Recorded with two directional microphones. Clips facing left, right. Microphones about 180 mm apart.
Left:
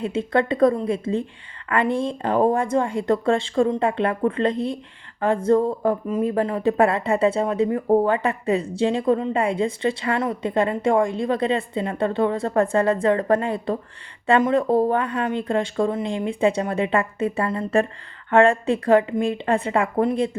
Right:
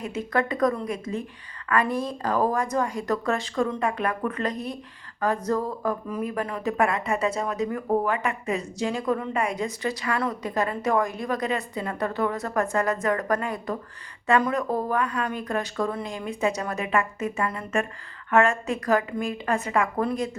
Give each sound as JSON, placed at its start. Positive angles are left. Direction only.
{"t": 0.0, "sound": "speech", "side_deg": 30}